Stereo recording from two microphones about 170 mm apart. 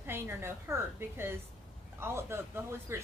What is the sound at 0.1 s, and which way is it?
A woman's voice, 15° right (ahead or behind).